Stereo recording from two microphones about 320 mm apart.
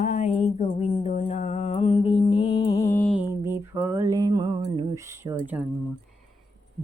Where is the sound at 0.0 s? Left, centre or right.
Left.